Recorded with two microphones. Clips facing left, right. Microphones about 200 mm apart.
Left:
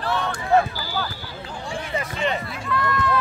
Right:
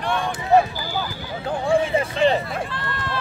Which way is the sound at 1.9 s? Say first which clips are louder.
Right 6 dB; 30° right (ahead or behind).